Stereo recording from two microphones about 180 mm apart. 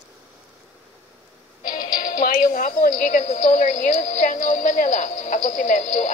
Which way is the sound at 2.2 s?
50° left (ahead or behind).